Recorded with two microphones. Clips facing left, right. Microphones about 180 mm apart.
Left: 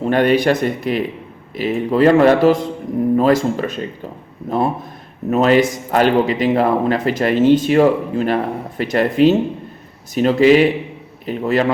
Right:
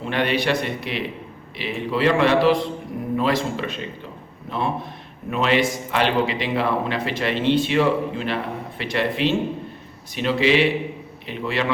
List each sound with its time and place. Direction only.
0.0 s speech: 45° left (ahead or behind)